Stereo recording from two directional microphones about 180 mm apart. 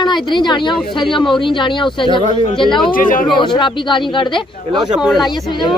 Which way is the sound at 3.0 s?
50° left (ahead or behind).